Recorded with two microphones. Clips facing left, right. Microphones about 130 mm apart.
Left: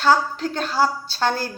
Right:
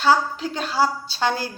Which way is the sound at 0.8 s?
45° left (ahead or behind).